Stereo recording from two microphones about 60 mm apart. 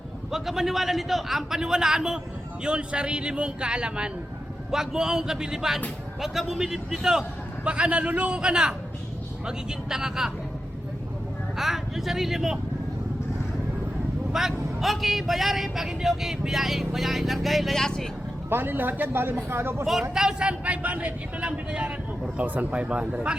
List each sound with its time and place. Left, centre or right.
0.3 s a man's voice: centre
11.5 s speech: centre
14.3 s speech: centre
18.4 s speech: right
19.8 s a man's voice: centre